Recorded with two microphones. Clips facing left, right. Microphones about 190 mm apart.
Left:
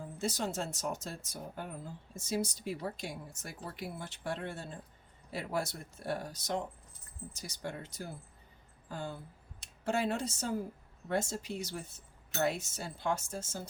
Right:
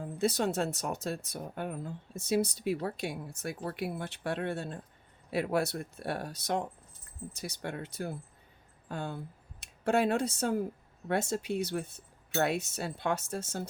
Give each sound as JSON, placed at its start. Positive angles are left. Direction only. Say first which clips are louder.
{"t": 0.0, "sound": "speech", "louder": "right 6 dB", "side_deg": -60}